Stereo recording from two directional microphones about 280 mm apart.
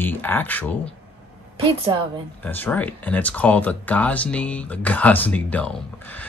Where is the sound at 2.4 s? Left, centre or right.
Centre.